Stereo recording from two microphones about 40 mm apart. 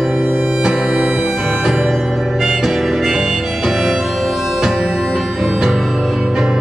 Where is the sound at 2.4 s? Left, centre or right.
Centre.